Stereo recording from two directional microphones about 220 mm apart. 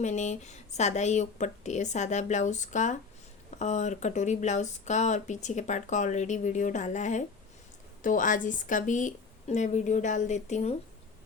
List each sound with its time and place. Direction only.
0.0 s speech: 30° left (ahead or behind)